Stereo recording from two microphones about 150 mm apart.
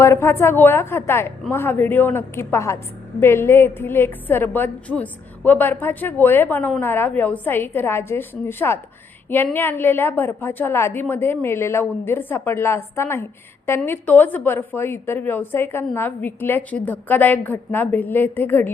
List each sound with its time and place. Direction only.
0.0 s a woman's voice: 20° left (ahead or behind)